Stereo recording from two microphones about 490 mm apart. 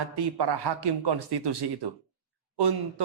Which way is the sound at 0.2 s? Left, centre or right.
Right.